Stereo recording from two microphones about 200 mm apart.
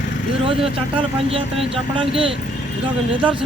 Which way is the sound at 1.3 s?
30° right (ahead or behind).